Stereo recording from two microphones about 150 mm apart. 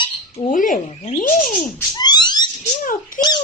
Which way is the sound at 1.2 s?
65° left (ahead or behind).